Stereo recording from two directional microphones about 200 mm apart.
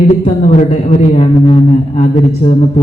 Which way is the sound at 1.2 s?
30° left (ahead or behind).